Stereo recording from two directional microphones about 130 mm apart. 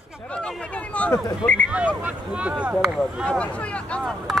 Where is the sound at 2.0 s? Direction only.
10° right (ahead or behind).